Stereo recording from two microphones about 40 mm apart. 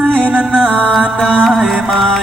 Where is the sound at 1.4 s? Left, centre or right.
Centre.